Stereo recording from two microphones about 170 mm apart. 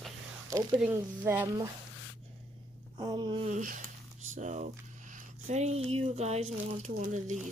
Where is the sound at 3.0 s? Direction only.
25° right (ahead or behind).